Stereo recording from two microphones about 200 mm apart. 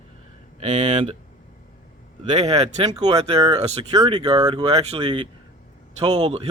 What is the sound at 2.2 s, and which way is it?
Speech, 30° right (ahead or behind).